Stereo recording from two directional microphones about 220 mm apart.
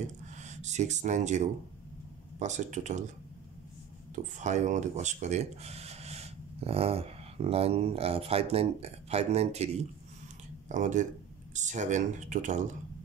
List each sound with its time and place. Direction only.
0.4 s speech: 30° right (ahead or behind)
4.1 s speech: 30° right (ahead or behind)
10.7 s speech: 35° right (ahead or behind)